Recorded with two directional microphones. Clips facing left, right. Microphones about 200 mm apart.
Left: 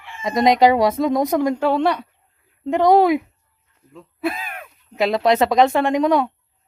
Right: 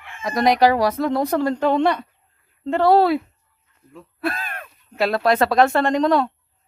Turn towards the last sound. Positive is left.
turn(degrees=10)  # may be behind; listen again after turning